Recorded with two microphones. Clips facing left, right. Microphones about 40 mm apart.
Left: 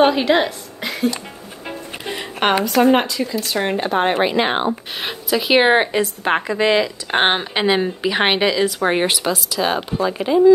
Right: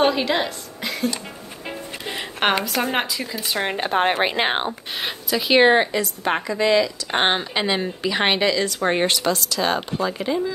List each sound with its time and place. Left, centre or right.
0.1 s a woman's voice: centre
2.1 s speech: centre
3.3 s speech: centre
3.7 s a woman's voice: right
5.0 s speech: centre
5.7 s speech: left